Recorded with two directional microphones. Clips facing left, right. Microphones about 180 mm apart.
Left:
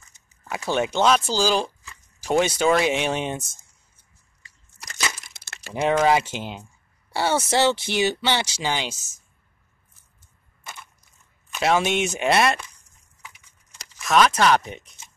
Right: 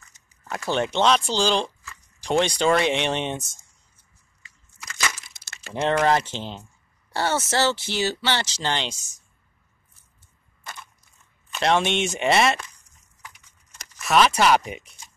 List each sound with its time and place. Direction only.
0.4 s speech: 5° left (ahead or behind)
5.3 s a sound: 60° left (ahead or behind)
5.7 s speech: 5° left (ahead or behind)
11.5 s speech: 5° left (ahead or behind)
14.0 s speech: 5° right (ahead or behind)